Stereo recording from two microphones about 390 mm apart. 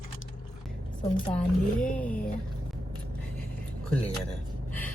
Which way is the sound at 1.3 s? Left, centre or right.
Centre.